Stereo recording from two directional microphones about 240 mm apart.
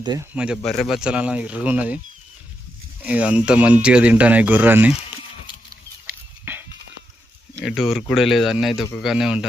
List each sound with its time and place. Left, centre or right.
0.0 s speech: centre
0.3 s speech: centre
3.1 s speech: centre
6.4 s a sound: centre
7.6 s speech: centre